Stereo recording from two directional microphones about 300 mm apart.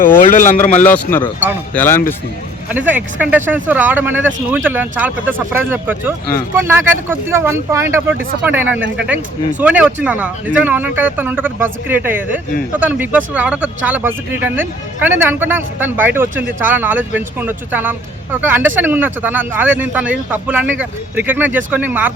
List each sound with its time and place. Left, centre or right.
0.2 s speech: left
0.8 s speech: centre
2.6 s speech: centre